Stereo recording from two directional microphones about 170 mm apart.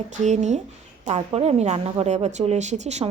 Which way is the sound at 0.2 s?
45° right (ahead or behind).